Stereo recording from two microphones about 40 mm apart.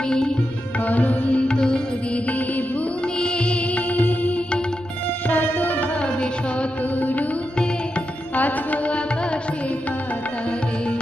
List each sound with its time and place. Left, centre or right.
0.0 s sitar: centre
0.7 s music: left
1.5 s music: centre
2.1 s music: left
6.8 s music: left
8.4 s music: left